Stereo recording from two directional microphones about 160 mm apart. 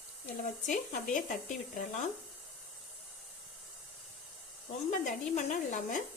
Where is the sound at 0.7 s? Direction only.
55° left (ahead or behind).